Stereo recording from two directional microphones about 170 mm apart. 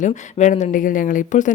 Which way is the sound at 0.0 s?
45° left (ahead or behind).